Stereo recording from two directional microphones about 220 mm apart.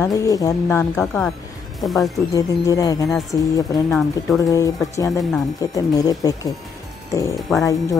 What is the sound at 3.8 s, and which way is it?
Speech, centre (ahead or behind).